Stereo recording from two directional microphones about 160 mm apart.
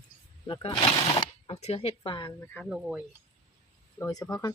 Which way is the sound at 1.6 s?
35° left (ahead or behind).